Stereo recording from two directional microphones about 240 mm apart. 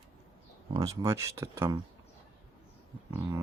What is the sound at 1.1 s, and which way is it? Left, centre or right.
Speech, centre.